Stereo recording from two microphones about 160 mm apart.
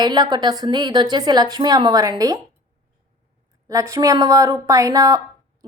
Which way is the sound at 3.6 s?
20° right (ahead or behind).